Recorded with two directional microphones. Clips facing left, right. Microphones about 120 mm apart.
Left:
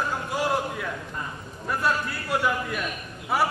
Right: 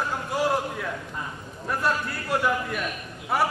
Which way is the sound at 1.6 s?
Centre (ahead or behind).